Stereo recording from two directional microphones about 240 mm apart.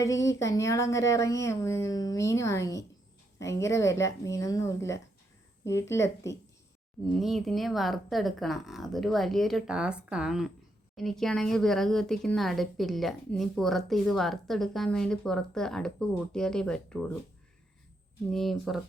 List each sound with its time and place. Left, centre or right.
0.0 s speech: centre
7.2 s speech: centre
18.3 s speech: centre